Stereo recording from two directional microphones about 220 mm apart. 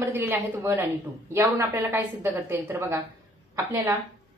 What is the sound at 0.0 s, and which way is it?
A woman's voice, 10° right (ahead or behind).